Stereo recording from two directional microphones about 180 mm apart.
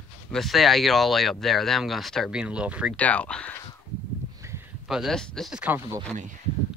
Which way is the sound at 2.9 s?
5° left (ahead or behind).